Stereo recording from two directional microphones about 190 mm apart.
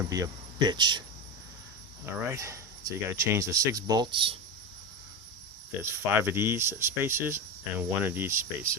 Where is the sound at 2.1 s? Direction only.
15° right (ahead or behind).